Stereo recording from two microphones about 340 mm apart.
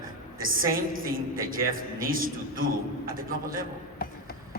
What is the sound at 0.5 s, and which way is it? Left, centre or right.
A woman's voice, right.